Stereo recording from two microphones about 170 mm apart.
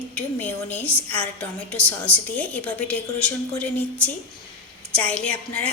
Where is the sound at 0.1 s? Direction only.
10° left (ahead or behind).